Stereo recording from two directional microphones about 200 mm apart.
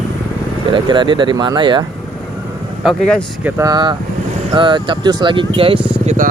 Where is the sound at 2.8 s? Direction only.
5° right (ahead or behind).